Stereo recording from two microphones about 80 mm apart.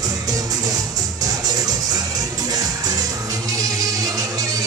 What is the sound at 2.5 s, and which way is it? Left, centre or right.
Music, right.